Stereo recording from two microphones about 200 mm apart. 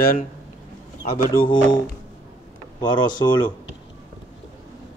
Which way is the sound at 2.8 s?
20° left (ahead or behind).